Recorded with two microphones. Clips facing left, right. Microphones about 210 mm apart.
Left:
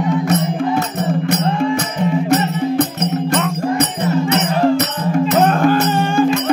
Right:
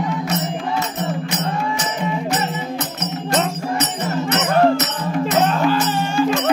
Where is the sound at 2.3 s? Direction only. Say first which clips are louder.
Left 7 dB; 60° left (ahead or behind).